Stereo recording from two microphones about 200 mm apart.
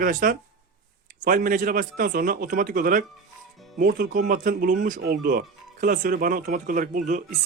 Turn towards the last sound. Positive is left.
turn(degrees=-40)  # may be behind; listen again after turning